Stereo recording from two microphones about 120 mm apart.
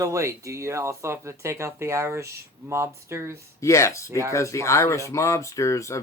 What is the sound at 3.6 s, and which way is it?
Speech, 25° left (ahead or behind).